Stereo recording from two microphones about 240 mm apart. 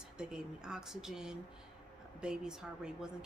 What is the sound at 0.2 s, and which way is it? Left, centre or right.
Speech, centre.